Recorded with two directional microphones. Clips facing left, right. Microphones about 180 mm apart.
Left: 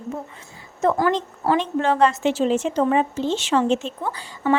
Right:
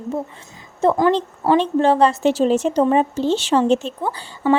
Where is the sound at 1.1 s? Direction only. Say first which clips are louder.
Right 4 dB; 30° right (ahead or behind).